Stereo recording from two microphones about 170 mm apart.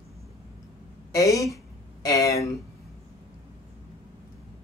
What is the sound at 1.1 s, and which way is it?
Speech, 20° left (ahead or behind).